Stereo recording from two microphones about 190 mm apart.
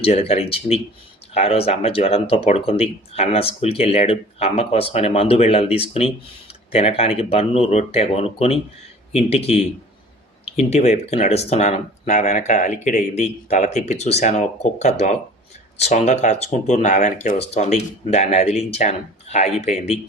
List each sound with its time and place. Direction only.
0.0 s speech: 30° left (ahead or behind)